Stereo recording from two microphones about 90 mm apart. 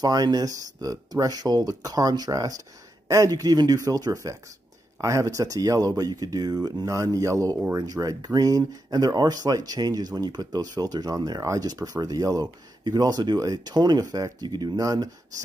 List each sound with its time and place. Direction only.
0.0 s speech: 45° right (ahead or behind)